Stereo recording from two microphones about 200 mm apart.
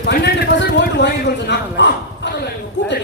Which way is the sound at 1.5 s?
60° left (ahead or behind).